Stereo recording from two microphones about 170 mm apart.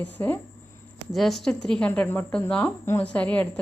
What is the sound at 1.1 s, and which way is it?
A woman's voice, centre (ahead or behind).